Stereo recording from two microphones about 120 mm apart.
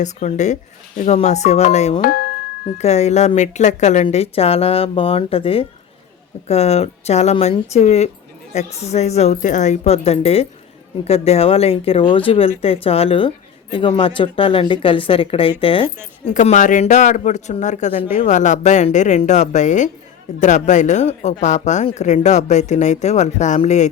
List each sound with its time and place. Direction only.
0.0 s speech: 85° left
4.0 s a woman's voice: 55° left (ahead or behind)
16.3 s speech: 90° left; by 21.3 s 70° left (ahead or behind)
21.4 s speech: 85° left